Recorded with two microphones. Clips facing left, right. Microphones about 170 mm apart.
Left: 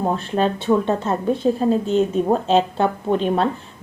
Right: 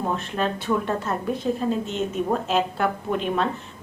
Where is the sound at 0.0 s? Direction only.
35° left (ahead or behind).